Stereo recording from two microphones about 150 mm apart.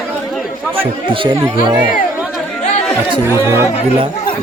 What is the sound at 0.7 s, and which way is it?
Speech, 35° right (ahead or behind).